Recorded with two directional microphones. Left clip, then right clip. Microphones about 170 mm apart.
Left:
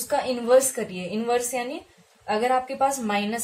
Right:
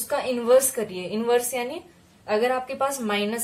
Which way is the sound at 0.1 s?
30° right (ahead or behind).